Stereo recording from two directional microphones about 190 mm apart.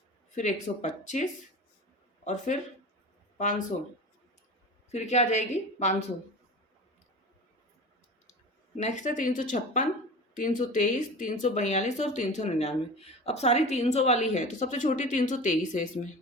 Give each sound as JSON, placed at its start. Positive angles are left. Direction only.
{"t": 0.8, "sound": "speech", "side_deg": 40}
{"t": 4.9, "sound": "speech", "side_deg": 35}
{"t": 8.8, "sound": "speech", "side_deg": 40}